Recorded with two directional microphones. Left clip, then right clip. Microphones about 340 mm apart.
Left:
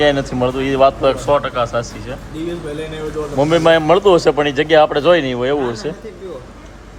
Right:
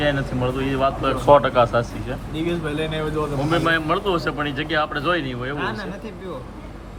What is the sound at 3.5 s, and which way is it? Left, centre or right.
Speech, centre.